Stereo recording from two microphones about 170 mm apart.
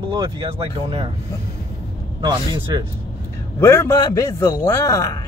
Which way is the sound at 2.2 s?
25° right (ahead or behind).